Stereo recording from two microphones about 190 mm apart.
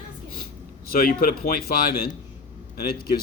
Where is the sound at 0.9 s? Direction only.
50° left (ahead or behind).